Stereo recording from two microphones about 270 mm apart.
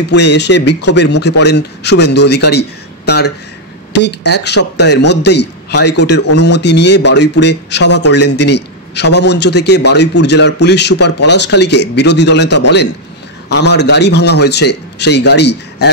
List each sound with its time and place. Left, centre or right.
0.1 s a man's voice: left
3.9 s a man's voice: left